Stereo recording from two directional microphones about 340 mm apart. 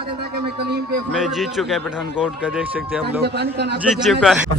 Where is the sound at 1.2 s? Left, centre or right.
Centre.